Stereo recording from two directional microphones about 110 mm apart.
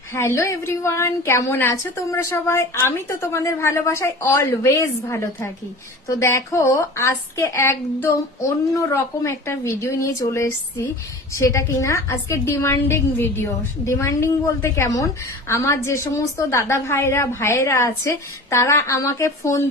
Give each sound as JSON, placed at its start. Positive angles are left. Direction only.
{"t": 0.1, "sound": "a woman's voice", "side_deg": 25}